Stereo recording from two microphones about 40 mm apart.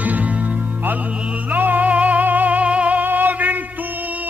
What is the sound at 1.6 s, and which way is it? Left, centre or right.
Music, right.